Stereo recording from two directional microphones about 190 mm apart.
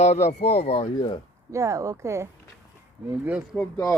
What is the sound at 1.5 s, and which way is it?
Speech, 15° right (ahead or behind).